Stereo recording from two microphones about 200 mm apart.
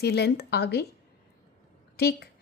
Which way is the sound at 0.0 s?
55° left (ahead or behind).